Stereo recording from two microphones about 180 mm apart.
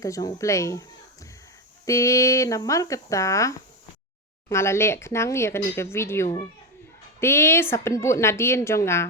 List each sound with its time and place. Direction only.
0.0 s speech: 20° left (ahead or behind)